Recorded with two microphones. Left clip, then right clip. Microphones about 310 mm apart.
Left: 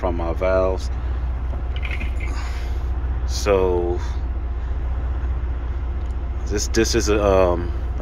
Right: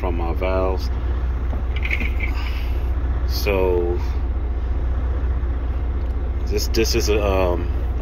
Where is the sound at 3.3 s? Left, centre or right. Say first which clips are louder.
Left 4 dB; centre.